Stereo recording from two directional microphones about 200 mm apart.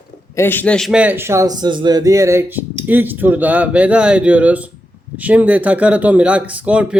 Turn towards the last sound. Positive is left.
turn(degrees=-5)  # may be behind; listen again after turning